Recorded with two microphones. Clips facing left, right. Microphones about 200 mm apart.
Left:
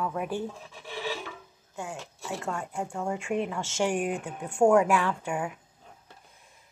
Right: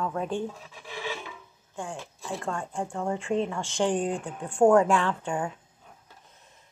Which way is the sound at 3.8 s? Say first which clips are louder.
Right 2 dB; 20° right (ahead or behind).